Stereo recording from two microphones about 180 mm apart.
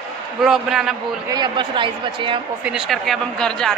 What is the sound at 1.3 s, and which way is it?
Speech, 25° right (ahead or behind).